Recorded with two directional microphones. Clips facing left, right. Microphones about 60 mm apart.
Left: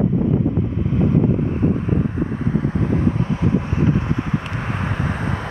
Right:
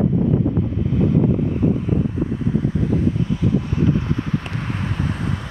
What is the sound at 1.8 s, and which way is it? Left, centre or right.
Vehicle, left.